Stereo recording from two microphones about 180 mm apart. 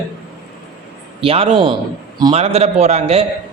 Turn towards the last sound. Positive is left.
turn(degrees=-35)  # may be behind; listen again after turning